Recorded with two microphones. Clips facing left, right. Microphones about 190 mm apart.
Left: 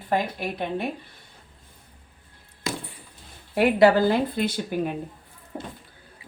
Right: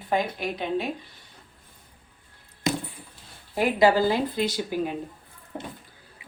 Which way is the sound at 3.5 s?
65° left (ahead or behind).